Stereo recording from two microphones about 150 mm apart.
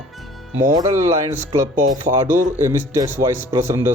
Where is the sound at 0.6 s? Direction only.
20° right (ahead or behind).